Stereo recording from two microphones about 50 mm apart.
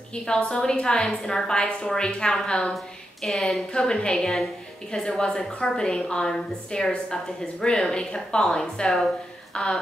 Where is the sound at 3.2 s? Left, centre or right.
Centre.